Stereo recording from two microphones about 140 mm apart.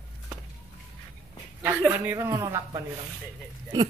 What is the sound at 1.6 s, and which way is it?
Speech, 10° right (ahead or behind).